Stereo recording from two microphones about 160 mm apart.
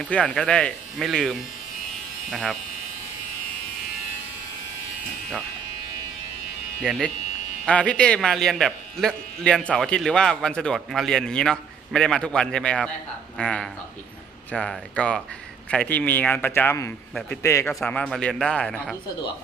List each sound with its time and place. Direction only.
0.0 s a man's voice: 5° left (ahead or behind)
7.6 s a man's voice: 5° left (ahead or behind)
17.7 s a man's voice: 5° left (ahead or behind)